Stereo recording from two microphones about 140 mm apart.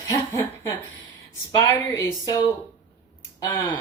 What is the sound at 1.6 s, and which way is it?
A woman's voice, 20° left (ahead or behind).